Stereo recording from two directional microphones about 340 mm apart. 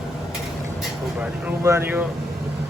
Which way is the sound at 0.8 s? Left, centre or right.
Centre.